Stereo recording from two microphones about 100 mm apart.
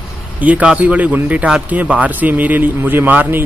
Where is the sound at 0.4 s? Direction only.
15° right (ahead or behind).